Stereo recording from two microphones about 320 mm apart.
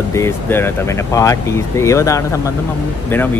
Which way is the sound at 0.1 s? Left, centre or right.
Centre.